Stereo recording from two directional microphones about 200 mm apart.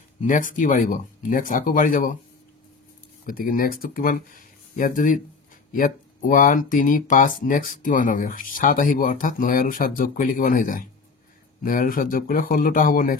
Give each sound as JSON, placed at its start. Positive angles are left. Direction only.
{"t": 0.2, "sound": "speech", "side_deg": 40}
{"t": 3.3, "sound": "speech", "side_deg": 45}